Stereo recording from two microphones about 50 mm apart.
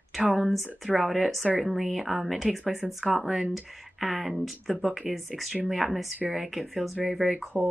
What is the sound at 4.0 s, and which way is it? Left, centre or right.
Speech, centre.